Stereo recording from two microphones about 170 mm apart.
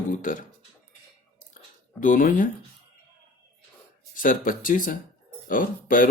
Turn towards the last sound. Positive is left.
turn(degrees=55)  # may be behind; listen again after turning